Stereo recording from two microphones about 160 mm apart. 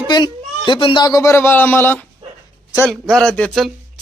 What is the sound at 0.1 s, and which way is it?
Speech, 30° left (ahead or behind).